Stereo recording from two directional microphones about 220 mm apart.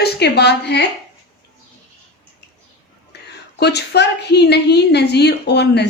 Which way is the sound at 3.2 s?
50° left (ahead or behind).